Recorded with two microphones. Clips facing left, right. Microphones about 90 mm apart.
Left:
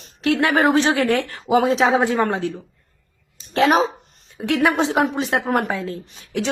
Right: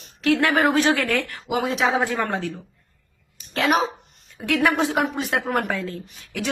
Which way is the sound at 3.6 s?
30° left (ahead or behind).